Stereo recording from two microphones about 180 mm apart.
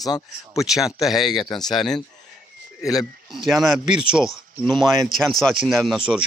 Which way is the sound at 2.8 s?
20° left (ahead or behind).